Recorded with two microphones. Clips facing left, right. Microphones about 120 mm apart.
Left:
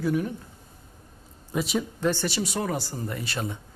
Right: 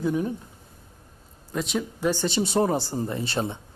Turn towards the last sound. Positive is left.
turn(degrees=-25)  # may be behind; listen again after turning